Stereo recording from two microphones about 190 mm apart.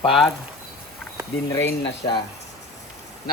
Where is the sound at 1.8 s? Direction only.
60° left (ahead or behind).